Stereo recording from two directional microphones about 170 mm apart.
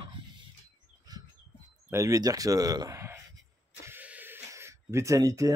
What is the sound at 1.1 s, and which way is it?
Bird, 25° right (ahead or behind).